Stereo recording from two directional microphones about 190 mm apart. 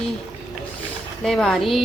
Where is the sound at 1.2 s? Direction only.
Centre (ahead or behind).